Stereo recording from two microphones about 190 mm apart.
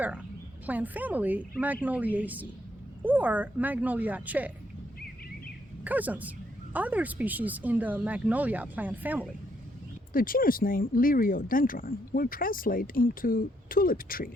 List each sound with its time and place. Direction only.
0.6 s speech: 10° right (ahead or behind)
5.8 s speech: 10° right (ahead or behind)
10.1 s speech: 50° left (ahead or behind)